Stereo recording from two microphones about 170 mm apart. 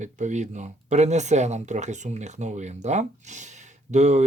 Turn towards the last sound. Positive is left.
turn(degrees=-45)  # may be behind; listen again after turning